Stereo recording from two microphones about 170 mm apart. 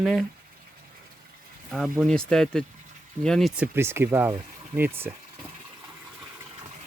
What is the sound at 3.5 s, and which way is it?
Speech, 10° right (ahead or behind).